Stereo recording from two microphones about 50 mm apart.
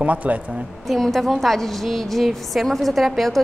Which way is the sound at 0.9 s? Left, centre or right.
Centre.